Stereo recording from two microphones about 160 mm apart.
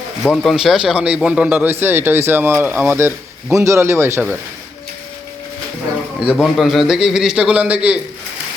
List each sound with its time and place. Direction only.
0.4 s speech: centre (ahead or behind)
6.1 s a man's voice: centre (ahead or behind)